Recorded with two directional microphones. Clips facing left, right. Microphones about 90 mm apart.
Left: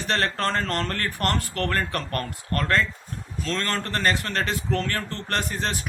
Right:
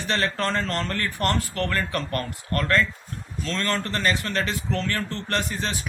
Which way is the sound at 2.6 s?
30° left (ahead or behind).